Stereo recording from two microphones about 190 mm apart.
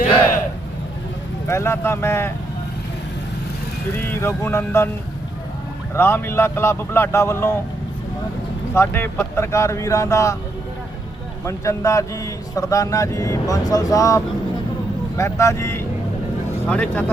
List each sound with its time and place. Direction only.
1.5 s speech: 15° left (ahead or behind)
3.9 s speech: 10° left (ahead or behind)
5.9 s speech: 10° left (ahead or behind)
8.7 s speech: 15° left (ahead or behind)
11.4 s speech: 15° left (ahead or behind)
15.2 s speech: 15° left (ahead or behind)